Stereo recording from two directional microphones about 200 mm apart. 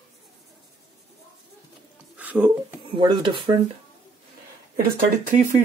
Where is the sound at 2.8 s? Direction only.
25° right (ahead or behind).